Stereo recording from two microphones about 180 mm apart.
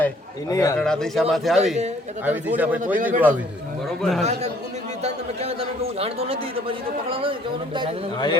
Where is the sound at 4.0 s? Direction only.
Centre (ahead or behind).